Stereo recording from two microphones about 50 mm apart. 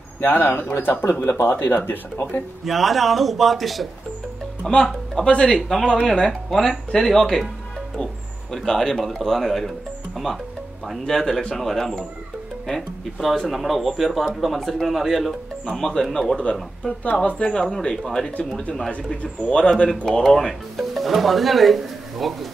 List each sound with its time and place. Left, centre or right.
0.2 s speech: left
2.6 s speech: centre
4.6 s a man's voice: centre
17.4 s speech: centre
19.5 s speech: centre